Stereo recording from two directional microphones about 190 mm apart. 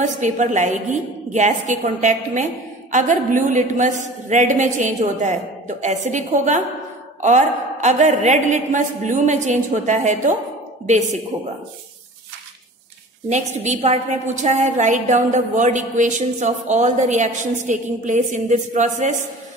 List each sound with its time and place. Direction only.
0.0 s a woman's voice: 40° right (ahead or behind)
13.3 s a woman's voice: 35° right (ahead or behind)